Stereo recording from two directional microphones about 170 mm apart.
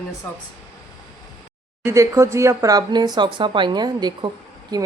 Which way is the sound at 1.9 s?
15° right (ahead or behind).